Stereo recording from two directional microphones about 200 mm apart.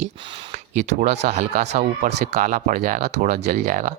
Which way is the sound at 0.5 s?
35° right (ahead or behind).